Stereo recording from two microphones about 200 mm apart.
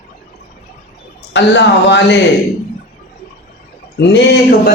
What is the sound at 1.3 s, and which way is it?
Speech, 60° left (ahead or behind).